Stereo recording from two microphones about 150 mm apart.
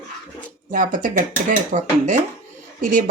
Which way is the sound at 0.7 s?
65° right (ahead or behind).